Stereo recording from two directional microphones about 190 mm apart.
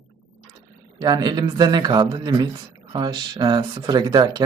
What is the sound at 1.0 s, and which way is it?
Speech, 20° right (ahead or behind).